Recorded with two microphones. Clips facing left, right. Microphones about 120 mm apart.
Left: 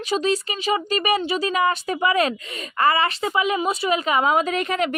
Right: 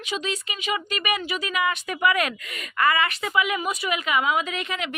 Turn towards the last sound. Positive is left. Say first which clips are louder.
# left 8 dB
turn(degrees=45)  # may be behind; listen again after turning